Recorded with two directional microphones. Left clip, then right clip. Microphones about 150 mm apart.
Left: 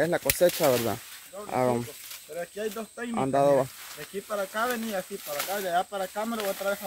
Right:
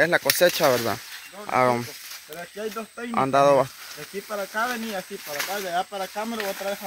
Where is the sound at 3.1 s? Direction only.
5° left (ahead or behind).